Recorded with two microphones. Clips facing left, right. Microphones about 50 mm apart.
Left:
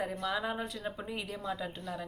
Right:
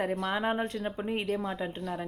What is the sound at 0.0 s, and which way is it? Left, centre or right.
A woman's voice, right.